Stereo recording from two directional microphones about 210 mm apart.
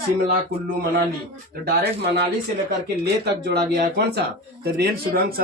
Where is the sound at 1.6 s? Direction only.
50° right (ahead or behind).